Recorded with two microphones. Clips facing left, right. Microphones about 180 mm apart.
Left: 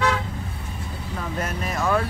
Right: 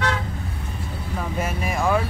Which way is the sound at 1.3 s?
10° right (ahead or behind).